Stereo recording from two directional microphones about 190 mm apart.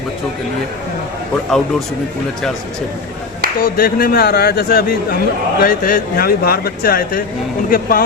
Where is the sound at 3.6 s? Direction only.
50° left (ahead or behind).